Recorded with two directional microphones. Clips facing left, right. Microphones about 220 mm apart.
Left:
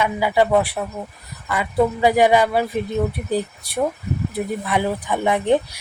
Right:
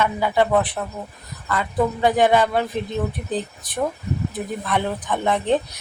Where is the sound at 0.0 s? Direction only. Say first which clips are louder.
Left 1 dB; 10° left (ahead or behind).